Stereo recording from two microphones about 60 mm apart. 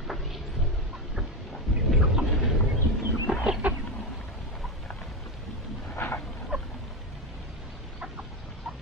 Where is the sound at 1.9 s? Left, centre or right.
Centre.